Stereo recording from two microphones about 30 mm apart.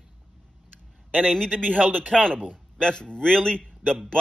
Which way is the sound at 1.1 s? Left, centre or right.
Left.